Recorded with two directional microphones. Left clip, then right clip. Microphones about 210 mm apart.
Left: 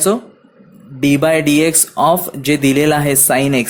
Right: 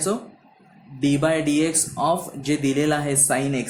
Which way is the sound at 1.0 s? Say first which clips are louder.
Left 8 dB; 30° left (ahead or behind).